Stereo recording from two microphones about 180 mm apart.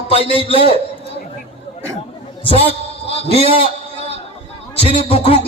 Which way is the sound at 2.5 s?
35° left (ahead or behind).